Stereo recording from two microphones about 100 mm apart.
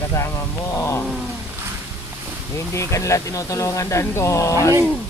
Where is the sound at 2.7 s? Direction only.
30° left (ahead or behind).